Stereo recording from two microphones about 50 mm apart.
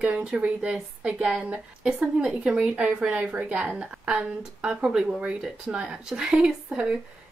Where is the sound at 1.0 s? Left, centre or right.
Centre.